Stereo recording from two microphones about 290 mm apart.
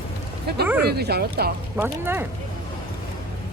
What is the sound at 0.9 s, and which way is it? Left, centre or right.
Speech, right.